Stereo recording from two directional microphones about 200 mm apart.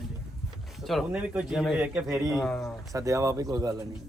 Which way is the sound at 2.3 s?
Centre (ahead or behind).